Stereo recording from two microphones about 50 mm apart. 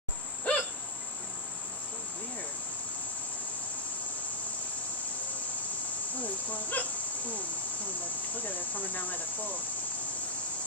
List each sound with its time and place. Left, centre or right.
0.5 s cricket: left
6.2 s speech: left
8.4 s cricket: left